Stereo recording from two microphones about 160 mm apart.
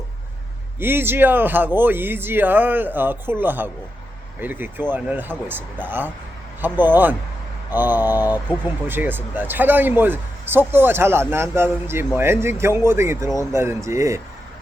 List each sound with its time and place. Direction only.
0.8 s a man's voice: 15° right (ahead or behind)